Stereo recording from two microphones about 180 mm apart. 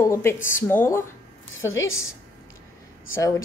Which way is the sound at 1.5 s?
90° left.